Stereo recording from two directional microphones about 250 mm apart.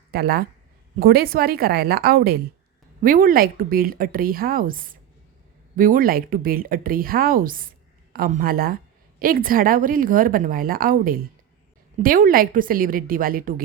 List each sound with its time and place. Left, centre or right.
0.1 s a woman's voice: right